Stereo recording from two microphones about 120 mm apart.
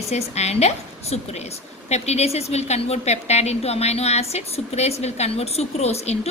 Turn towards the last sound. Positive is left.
turn(degrees=65)  # may be behind; listen again after turning